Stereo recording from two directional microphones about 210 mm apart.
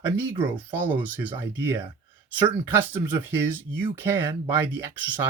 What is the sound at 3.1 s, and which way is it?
Speech, 10° right (ahead or behind).